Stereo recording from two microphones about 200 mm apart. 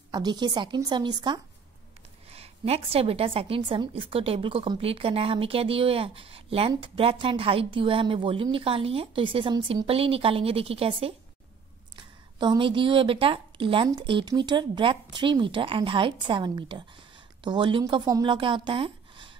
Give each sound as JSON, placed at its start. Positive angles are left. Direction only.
{"t": 0.1, "sound": "a woman's voice", "side_deg": -20}